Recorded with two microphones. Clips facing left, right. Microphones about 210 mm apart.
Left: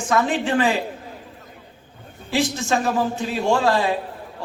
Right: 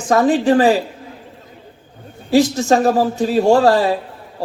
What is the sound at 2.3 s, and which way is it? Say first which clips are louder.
A man's voice: right 8 dB; 40° right (ahead or behind).